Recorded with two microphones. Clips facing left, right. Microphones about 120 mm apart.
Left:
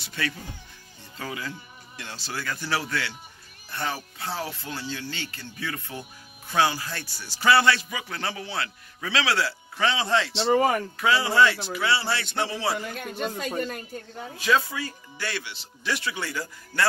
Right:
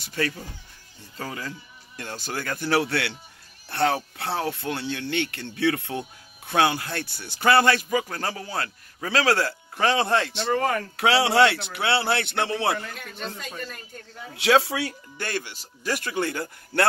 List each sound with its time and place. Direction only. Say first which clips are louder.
0.0 s speech: right 4 dB; 40° right (ahead or behind)
10.5 s speech: left 3 dB; 10° left (ahead or behind)
11.0 s speech: right 3 dB; 75° right (ahead or behind); by 12.8 s 55° right (ahead or behind)
13.4 s speech: left 7 dB; 50° left (ahead or behind)
14.3 s speech: right 4 dB; 80° right
15.1 s speech: right 2 dB; 45° right (ahead or behind)